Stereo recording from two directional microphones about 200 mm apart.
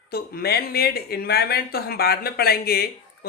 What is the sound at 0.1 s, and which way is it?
Speech, 50° left (ahead or behind).